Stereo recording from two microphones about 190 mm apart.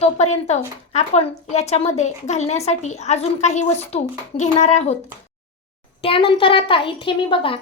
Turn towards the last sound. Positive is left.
turn(degrees=30)  # may be behind; listen again after turning